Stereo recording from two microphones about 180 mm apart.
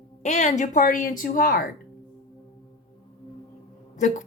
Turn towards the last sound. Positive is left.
turn(degrees=45)  # may be behind; listen again after turning